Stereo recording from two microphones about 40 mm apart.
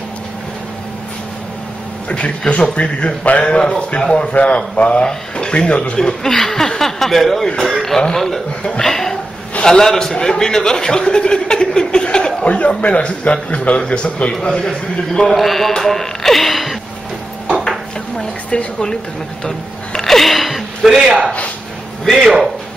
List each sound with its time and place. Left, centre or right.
2.0 s a man's voice: left
4.3 s a man's voice: left
5.9 s speech: centre
12.4 s a man's voice: left
14.4 s speech: centre
15.2 s a man's voice: centre
15.7 s radio: centre
17.6 s dishes: left
19.4 s speech: centre
22.2 s speech: centre